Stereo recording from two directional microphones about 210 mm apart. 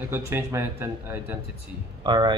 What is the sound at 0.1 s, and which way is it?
Speech, 10° right (ahead or behind).